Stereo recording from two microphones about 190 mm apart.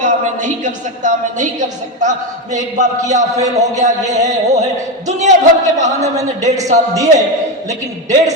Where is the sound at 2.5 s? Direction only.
40° right (ahead or behind).